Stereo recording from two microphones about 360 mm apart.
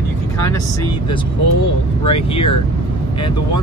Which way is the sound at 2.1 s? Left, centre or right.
Centre.